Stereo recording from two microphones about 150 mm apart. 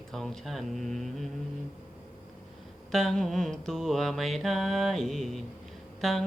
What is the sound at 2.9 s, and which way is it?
Speech, centre (ahead or behind).